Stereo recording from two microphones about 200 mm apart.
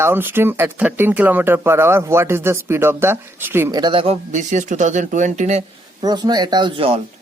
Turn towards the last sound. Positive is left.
turn(degrees=-25)  # may be behind; listen again after turning